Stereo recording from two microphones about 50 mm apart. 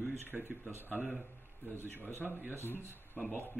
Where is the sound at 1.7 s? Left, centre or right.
Left.